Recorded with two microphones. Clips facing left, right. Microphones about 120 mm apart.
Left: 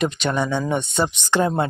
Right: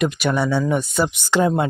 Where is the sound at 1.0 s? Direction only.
5° left (ahead or behind).